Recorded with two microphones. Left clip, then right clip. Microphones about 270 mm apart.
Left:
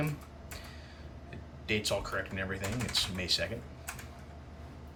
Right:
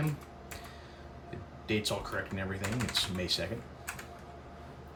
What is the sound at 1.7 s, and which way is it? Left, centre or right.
Speech, centre.